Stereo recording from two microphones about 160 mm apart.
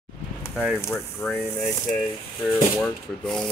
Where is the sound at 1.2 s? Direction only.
15° left (ahead or behind).